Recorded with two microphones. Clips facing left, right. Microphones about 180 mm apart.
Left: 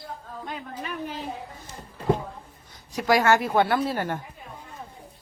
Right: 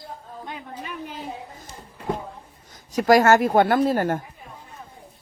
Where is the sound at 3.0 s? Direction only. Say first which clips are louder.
Right 5 dB; 45° right (ahead or behind).